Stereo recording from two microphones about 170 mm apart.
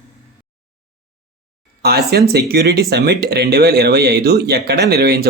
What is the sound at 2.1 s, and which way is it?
Speech, 70° right (ahead or behind).